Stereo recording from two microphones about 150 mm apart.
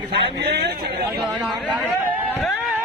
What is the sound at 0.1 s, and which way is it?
Speech, 90° right.